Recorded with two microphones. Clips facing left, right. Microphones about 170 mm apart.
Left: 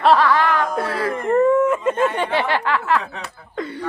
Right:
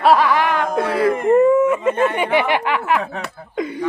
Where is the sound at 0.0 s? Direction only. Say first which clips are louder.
Right 1 dB; 10° right (ahead or behind).